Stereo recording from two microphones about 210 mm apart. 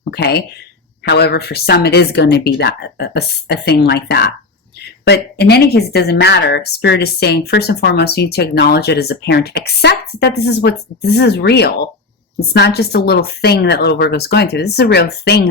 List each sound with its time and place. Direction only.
0.0 s a woman's voice: 50° left (ahead or behind)